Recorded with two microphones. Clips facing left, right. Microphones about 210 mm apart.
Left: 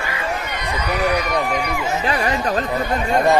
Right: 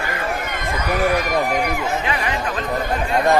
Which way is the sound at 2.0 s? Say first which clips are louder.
Left 3 dB; 35° left (ahead or behind).